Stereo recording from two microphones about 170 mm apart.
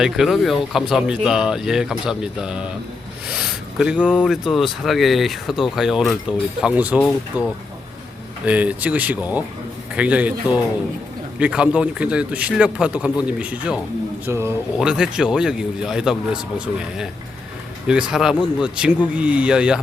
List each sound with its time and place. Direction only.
0.0 s speech: centre (ahead or behind)
4.0 s a man's voice: 10° left (ahead or behind); by 14.5 s 15° right (ahead or behind)
14.8 s speech: 5° right (ahead or behind)